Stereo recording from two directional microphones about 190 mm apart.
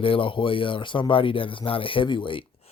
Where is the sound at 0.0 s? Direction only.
25° left (ahead or behind).